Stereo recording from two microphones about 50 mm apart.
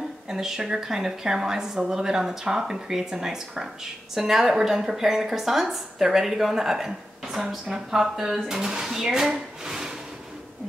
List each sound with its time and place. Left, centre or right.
0.3 s a woman's voice: centre